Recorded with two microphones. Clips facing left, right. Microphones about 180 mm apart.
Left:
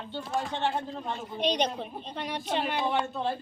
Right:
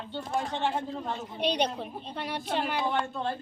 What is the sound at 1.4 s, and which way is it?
A woman's voice, 10° right (ahead or behind).